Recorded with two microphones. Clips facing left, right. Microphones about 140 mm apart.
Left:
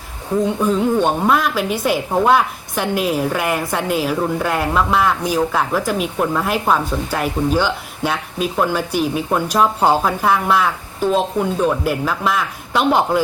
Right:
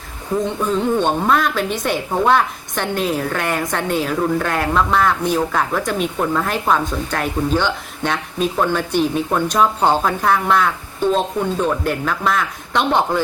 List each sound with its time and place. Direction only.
0.4 s a woman's voice: 10° left (ahead or behind)